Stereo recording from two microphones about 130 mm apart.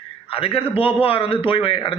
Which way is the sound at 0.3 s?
45° left (ahead or behind).